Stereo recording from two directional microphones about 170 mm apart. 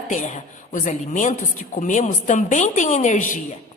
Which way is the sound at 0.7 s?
45° left (ahead or behind).